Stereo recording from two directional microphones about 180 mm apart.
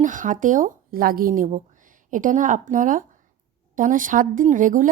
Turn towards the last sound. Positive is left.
turn(degrees=-45)  # may be behind; listen again after turning